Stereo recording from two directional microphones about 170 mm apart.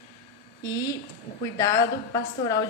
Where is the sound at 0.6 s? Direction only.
20° left (ahead or behind).